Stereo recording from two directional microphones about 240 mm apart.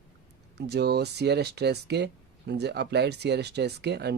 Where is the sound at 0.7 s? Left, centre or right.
Right.